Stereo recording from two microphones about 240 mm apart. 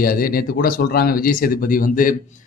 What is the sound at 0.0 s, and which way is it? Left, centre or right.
Speech, left.